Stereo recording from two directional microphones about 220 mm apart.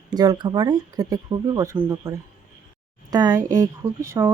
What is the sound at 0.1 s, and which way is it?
A woman's voice, 20° right (ahead or behind).